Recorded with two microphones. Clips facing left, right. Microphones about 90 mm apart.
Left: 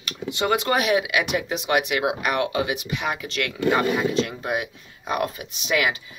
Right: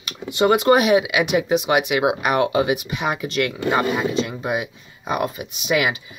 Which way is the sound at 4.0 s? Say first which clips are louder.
Right 1 dB; 5° right (ahead or behind).